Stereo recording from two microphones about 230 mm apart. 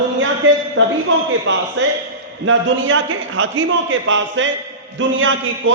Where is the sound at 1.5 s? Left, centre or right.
Right.